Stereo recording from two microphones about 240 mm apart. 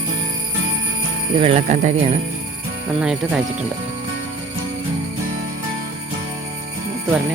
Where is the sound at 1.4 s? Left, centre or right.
Right.